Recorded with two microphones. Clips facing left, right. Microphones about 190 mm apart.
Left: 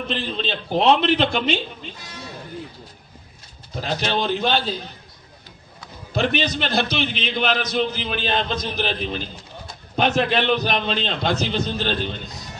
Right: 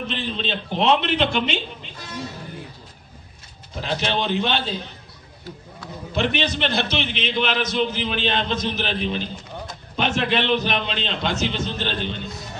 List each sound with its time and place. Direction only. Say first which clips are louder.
0.1 s a man's voice: left 3 dB; 40° left (ahead or behind)
3.8 s a man's voice: left 1 dB; 40° left (ahead or behind)
6.1 s a man's voice: left 1 dB; 35° left (ahead or behind)